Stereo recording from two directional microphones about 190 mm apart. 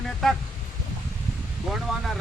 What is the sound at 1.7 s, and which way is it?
Speech, centre (ahead or behind).